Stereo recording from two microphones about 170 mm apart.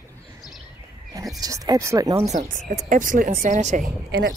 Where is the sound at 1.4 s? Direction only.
20° right (ahead or behind).